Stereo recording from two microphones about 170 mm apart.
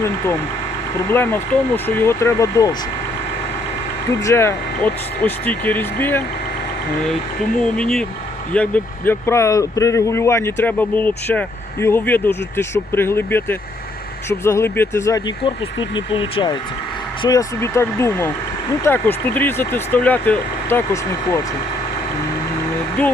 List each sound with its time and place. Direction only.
1.1 s speech: 15° left (ahead or behind)
4.2 s speech: 15° left (ahead or behind)
7.6 s speech: 5° left (ahead or behind)
15.4 s speech: 30° left (ahead or behind)
17.2 s speech: 20° left (ahead or behind)